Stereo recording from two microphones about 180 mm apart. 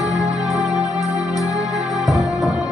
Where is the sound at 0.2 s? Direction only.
20° left (ahead or behind).